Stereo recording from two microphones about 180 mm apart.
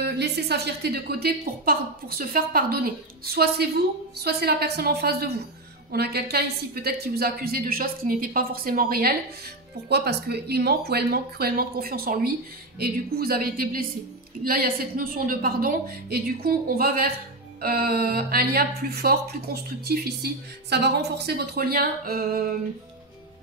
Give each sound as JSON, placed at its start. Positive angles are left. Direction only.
{"t": 0.0, "sound": "a woman's voice", "side_deg": -65}